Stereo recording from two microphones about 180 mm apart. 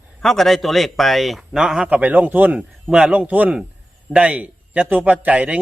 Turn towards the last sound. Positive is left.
turn(degrees=-10)  # may be behind; listen again after turning